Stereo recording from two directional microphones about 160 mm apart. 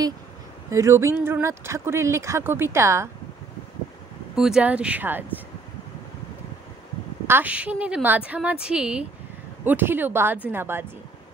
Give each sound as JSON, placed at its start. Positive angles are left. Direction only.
{"t": 0.7, "sound": "speech", "side_deg": -20}
{"t": 4.4, "sound": "speech", "side_deg": -5}
{"t": 7.2, "sound": "speech", "side_deg": -10}